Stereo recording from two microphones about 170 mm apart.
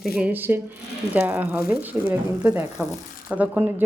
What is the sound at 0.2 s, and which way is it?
Speech, 10° right (ahead or behind).